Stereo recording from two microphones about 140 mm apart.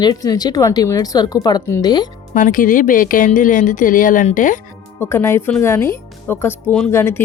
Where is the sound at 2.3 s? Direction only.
70° left (ahead or behind).